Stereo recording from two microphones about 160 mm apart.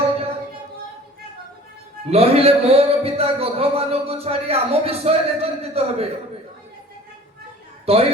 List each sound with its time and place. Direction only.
2.0 s speech: 40° right (ahead or behind)
7.9 s speech: 40° right (ahead or behind)